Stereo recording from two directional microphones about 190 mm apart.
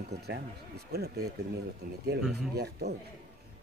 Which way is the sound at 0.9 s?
55° right (ahead or behind).